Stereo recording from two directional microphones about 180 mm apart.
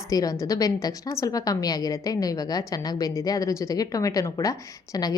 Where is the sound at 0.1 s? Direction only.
20° left (ahead or behind).